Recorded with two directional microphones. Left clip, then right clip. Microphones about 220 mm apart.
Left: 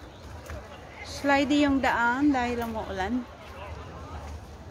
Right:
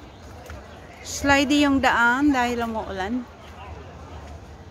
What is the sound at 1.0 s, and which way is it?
A woman's voice, 30° right (ahead or behind).